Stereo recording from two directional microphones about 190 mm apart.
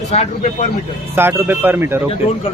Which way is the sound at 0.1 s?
40° left (ahead or behind).